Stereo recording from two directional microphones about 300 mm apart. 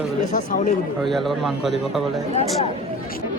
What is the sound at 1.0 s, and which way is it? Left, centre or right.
A man's voice, centre.